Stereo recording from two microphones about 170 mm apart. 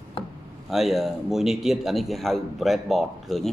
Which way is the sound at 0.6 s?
Centre (ahead or behind).